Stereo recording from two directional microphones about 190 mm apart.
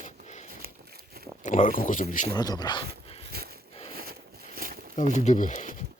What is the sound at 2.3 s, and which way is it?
Speech, 20° left (ahead or behind).